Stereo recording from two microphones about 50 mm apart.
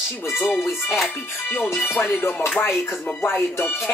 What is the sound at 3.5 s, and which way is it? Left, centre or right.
Music, left.